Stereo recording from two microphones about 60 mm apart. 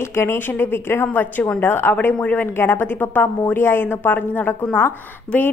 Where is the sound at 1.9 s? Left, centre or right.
Left.